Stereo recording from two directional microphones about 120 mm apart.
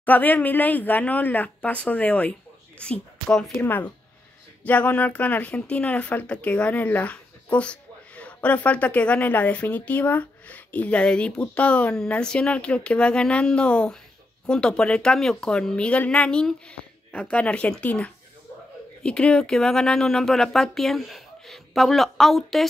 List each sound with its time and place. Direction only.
0.0 s speech: 15° left (ahead or behind)